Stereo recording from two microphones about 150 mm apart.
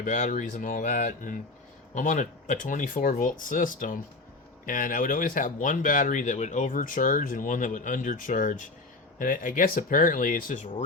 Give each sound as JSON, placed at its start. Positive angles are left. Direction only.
{"t": 0.0, "sound": "speech", "side_deg": 60}